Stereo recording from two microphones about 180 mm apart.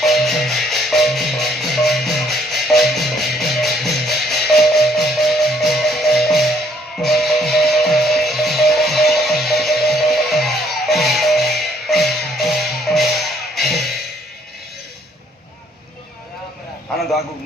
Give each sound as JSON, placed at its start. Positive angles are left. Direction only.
{"t": 0.0, "sound": "music", "side_deg": 0}